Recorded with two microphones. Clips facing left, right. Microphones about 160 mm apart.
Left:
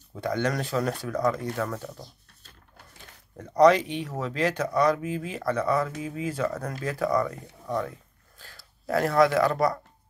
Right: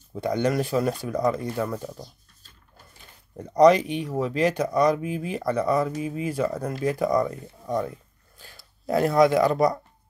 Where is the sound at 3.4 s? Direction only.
10° right (ahead or behind).